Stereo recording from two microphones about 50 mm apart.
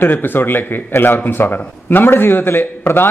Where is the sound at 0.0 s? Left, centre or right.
Left.